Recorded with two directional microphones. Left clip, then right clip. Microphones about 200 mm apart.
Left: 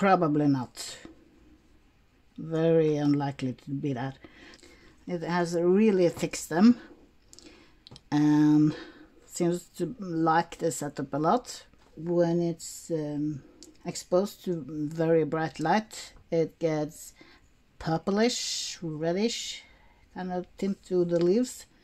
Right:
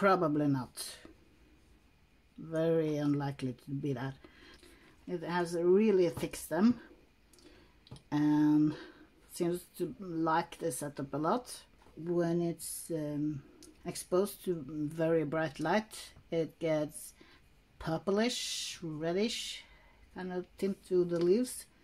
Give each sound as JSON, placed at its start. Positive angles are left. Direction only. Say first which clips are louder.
{"t": 0.0, "sound": "speech", "louder": "left 5 dB", "side_deg": 35}
{"t": 2.5, "sound": "speech", "louder": "left 7 dB", "side_deg": 35}
{"t": 7.8, "sound": "speech", "louder": "left 6 dB", "side_deg": 45}